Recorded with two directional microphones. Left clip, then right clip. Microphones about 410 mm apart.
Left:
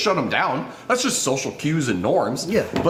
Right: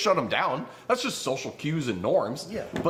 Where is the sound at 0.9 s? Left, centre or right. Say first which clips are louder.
Left 6 dB; right.